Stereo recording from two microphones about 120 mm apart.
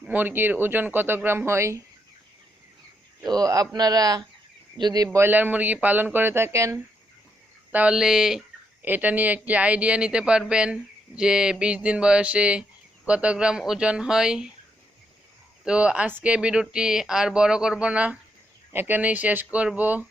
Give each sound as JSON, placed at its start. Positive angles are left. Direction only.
{"t": 0.0, "sound": "speech", "side_deg": -15}
{"t": 3.2, "sound": "speech", "side_deg": -30}
{"t": 5.1, "sound": "speech", "side_deg": -15}
{"t": 7.7, "sound": "speech", "side_deg": -10}
{"t": 8.8, "sound": "speech", "side_deg": -15}
{"t": 15.6, "sound": "speech", "side_deg": -10}